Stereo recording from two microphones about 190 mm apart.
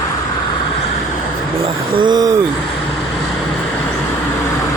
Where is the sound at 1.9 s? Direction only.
20° right (ahead or behind).